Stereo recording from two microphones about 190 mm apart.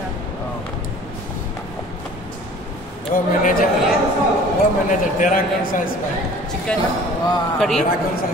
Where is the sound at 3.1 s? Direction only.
45° left (ahead or behind).